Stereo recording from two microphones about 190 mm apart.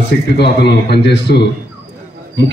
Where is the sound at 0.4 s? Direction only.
60° left (ahead or behind).